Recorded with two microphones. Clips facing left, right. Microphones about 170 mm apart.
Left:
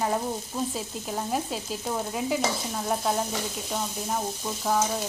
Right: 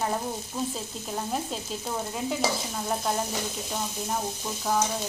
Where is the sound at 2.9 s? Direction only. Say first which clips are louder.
Left 2 dB; centre (ahead or behind).